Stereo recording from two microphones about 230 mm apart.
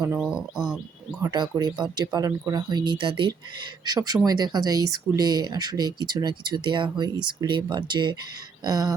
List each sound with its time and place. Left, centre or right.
0.0 s speech: centre
1.2 s speech: centre